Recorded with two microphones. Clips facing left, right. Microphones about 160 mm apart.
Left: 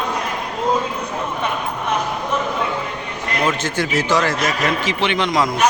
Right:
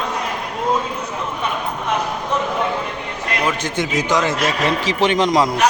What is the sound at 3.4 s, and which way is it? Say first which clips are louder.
Speech: left 1 dB; 15° right (ahead or behind).